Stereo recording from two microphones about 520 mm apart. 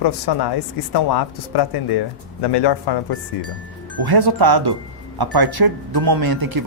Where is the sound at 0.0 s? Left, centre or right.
Left.